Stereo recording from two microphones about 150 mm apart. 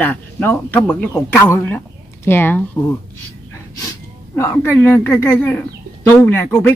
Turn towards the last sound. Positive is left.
turn(degrees=15)  # may be behind; listen again after turning